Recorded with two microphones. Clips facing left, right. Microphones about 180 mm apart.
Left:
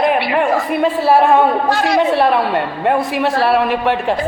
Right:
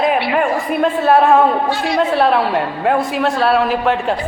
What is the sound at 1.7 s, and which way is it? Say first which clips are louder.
Speech: left 3 dB; 90° left.